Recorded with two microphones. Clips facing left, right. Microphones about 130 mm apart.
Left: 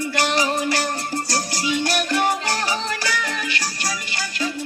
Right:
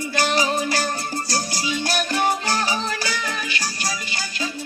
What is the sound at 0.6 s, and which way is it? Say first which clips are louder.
Music: left 1 dB; 70° left (ahead or behind).